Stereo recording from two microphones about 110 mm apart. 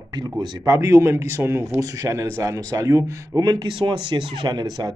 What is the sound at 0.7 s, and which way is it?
Speech, 30° right (ahead or behind).